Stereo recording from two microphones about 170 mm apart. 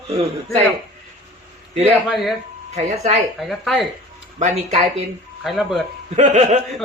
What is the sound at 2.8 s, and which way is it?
Speech, 40° right (ahead or behind).